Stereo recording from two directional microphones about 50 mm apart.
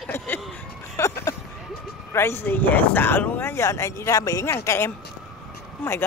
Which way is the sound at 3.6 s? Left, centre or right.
Left.